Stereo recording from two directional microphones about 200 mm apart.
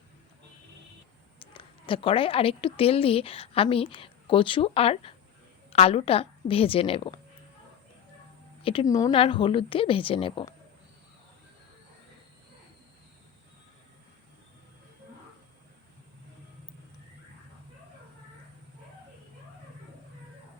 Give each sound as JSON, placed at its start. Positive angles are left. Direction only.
{"t": 1.5, "sound": "speech", "side_deg": 25}
{"t": 8.6, "sound": "speech", "side_deg": 20}